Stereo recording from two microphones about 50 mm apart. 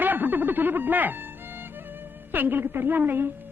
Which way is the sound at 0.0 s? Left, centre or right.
Right.